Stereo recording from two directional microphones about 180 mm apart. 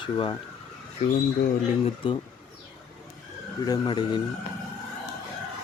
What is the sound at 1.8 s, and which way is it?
Speech, 30° left (ahead or behind).